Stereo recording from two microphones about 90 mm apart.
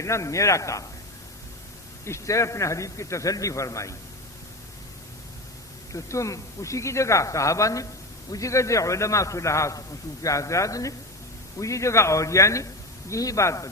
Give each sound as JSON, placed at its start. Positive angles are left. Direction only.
{"t": 0.0, "sound": "speech", "side_deg": 35}
{"t": 2.0, "sound": "speech", "side_deg": 35}
{"t": 5.9, "sound": "speech", "side_deg": 35}